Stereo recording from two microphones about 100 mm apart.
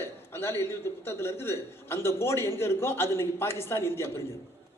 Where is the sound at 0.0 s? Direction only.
25° left (ahead or behind).